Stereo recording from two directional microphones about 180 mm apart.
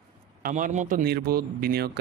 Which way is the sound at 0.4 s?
45° right (ahead or behind).